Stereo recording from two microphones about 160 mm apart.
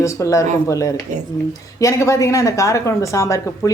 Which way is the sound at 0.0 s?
20° left (ahead or behind).